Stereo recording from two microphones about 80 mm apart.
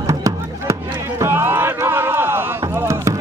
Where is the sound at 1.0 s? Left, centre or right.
Right.